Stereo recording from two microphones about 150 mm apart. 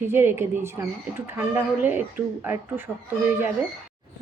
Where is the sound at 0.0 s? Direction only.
15° right (ahead or behind).